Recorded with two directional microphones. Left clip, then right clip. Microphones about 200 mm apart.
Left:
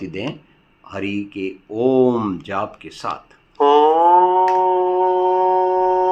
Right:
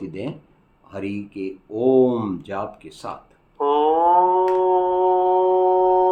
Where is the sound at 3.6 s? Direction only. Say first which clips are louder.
Left 6 dB; 20° left (ahead or behind).